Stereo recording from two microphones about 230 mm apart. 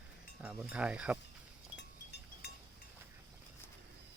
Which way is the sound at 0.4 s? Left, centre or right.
Centre.